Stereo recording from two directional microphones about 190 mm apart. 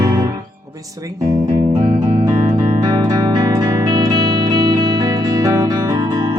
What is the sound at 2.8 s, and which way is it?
Music, 20° right (ahead or behind).